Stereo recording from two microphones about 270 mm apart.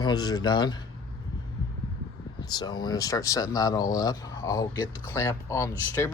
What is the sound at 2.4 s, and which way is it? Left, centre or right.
Speech, centre.